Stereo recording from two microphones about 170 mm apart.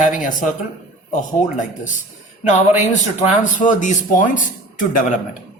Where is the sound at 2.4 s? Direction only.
45° left (ahead or behind).